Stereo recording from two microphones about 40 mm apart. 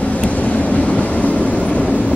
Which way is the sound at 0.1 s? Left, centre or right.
Left.